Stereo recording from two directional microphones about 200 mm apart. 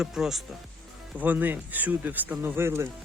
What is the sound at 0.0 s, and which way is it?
Speech, centre (ahead or behind).